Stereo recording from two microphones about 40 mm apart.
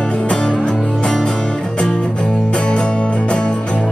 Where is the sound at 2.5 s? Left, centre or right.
Left.